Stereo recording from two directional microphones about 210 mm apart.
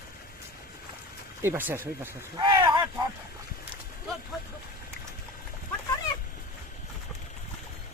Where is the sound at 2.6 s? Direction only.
20° right (ahead or behind).